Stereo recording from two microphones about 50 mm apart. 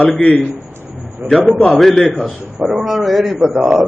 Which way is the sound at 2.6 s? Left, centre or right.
Centre.